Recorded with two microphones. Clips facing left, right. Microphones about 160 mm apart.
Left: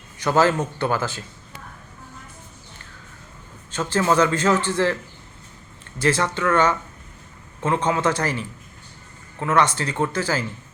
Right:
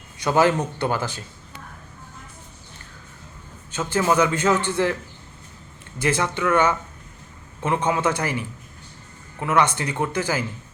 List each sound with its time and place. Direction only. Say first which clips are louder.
0.2 s a man's voice: even; 15° right (ahead or behind)
3.7 s a man's voice: left 1 dB; 10° right (ahead or behind)
6.0 s a man's voice: left 1 dB; 10° right (ahead or behind)